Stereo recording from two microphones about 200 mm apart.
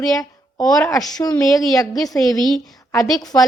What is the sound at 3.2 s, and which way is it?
Speech, 20° left (ahead or behind).